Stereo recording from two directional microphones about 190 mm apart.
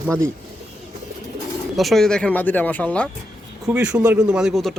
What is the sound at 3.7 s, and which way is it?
Speech, 10° right (ahead or behind).